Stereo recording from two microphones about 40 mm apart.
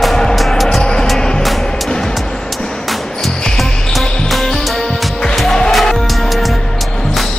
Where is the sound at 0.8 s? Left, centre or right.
Centre.